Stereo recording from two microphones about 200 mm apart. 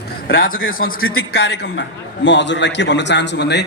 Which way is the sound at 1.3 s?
55° left (ahead or behind).